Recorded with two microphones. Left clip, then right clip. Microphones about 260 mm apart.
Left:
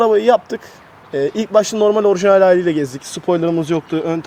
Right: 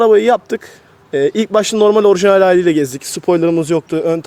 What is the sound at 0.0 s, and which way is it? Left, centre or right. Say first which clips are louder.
A man's voice: right 2 dB; right.